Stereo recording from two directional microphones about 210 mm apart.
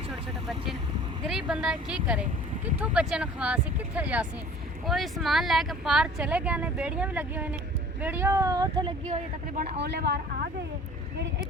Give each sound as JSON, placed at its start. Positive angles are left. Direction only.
{"t": 0.1, "sound": "vehicle", "side_deg": 0}
{"t": 1.3, "sound": "speech", "side_deg": -5}
{"t": 9.0, "sound": "speech", "side_deg": -40}
{"t": 9.8, "sound": "a woman's voice", "side_deg": -55}